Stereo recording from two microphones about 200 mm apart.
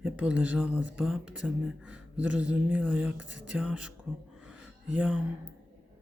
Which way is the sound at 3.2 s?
65° right (ahead or behind).